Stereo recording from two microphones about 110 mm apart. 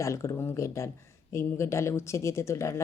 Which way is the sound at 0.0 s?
25° left (ahead or behind).